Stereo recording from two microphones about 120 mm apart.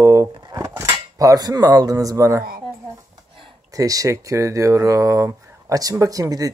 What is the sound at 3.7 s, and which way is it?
Speech, 30° right (ahead or behind).